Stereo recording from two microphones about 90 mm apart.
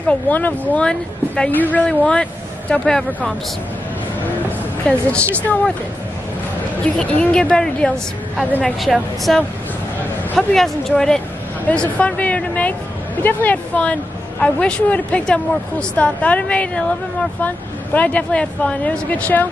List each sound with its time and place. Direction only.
0.1 s speech: 20° left (ahead or behind)
4.5 s a sound: 10° left (ahead or behind)
7.0 s speech: 10° left (ahead or behind)